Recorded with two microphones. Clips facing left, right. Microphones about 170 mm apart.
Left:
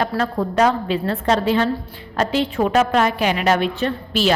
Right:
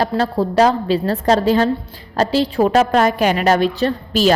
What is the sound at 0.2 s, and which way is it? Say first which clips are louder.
A woman's voice: right 4 dB; 35° right (ahead or behind).